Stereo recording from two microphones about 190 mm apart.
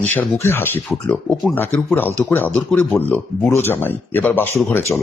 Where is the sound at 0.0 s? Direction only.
10° left (ahead or behind).